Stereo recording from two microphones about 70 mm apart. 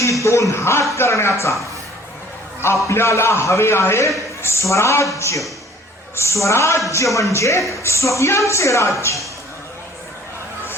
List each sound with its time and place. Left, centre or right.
0.0 s a man's voice: left
2.8 s a man's voice: left